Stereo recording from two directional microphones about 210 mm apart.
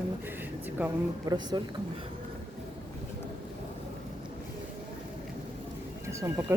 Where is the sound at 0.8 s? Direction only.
10° right (ahead or behind).